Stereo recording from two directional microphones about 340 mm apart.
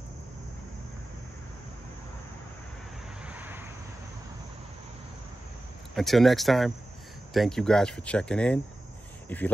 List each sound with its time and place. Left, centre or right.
3.3 s vehicle: centre
5.9 s speech: centre